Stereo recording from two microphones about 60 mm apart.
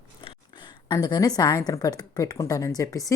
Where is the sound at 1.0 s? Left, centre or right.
Left.